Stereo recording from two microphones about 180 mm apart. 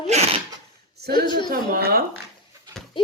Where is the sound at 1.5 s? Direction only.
55° right (ahead or behind).